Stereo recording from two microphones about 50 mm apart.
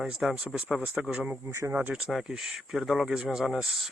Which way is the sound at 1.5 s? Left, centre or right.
Right.